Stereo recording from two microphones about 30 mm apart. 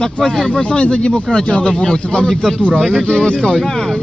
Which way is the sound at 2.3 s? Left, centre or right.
Centre.